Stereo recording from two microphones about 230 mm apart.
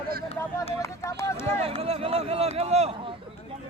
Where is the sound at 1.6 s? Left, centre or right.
Right.